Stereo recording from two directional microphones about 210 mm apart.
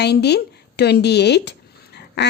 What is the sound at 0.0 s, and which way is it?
A woman's voice, 50° left (ahead or behind).